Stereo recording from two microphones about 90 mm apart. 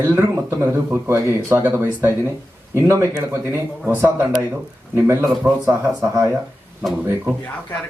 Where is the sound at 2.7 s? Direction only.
30° right (ahead or behind).